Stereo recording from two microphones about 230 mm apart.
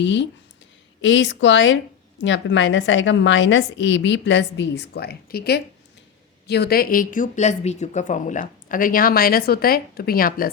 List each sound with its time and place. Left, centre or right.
0.0 s a woman's voice: left